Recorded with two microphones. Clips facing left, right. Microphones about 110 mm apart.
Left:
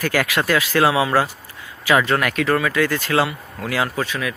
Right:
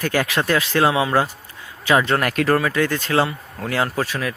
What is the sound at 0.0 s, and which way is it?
Speech, 25° right (ahead or behind).